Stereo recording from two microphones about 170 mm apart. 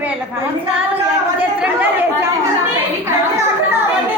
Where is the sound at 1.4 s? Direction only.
10° right (ahead or behind).